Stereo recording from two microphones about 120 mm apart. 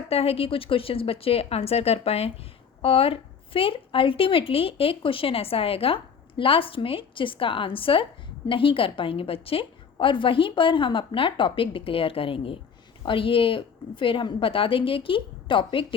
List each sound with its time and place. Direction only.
0.1 s a woman's voice: 55° left (ahead or behind)